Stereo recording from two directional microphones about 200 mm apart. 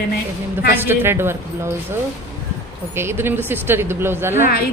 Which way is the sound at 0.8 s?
10° right (ahead or behind).